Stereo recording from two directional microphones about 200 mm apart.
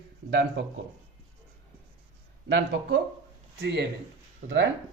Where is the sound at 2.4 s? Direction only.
65° right (ahead or behind).